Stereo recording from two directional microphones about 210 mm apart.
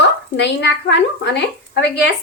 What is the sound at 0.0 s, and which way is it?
A woman's voice, 55° left (ahead or behind).